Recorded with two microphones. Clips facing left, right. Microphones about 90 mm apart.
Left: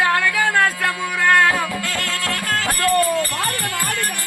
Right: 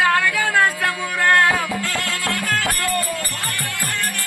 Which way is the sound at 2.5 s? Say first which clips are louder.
Left 1 dB; 20° left (ahead or behind).